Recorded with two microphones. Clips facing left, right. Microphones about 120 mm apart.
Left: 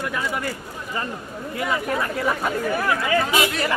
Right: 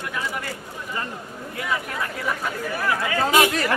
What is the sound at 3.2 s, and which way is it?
Speech, 45° right (ahead or behind).